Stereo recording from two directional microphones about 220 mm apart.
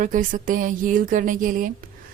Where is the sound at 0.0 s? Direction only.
35° right (ahead or behind).